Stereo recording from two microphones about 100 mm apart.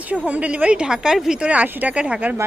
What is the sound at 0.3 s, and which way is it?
Speech, 15° right (ahead or behind).